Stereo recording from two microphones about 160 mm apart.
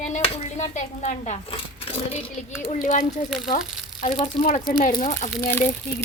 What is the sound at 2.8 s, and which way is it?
Speech, 60° left (ahead or behind).